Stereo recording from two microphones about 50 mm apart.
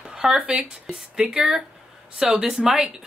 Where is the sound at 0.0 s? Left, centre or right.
Centre.